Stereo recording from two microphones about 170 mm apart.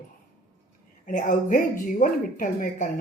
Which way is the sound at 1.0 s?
50° left (ahead or behind).